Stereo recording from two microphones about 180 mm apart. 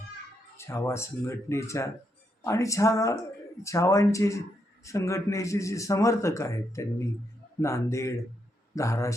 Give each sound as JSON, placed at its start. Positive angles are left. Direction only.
{"t": 0.5, "sound": "a man's voice", "side_deg": 15}